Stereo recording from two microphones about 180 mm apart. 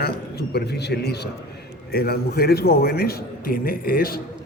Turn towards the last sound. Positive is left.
turn(degrees=55)  # may be behind; listen again after turning